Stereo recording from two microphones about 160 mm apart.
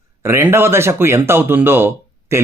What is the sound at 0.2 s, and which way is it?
Speech, 15° right (ahead or behind).